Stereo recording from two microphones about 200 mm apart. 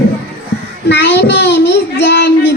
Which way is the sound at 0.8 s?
60° left (ahead or behind).